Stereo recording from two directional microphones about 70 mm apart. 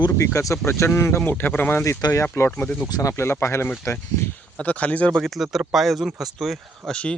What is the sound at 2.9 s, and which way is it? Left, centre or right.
Speech, left.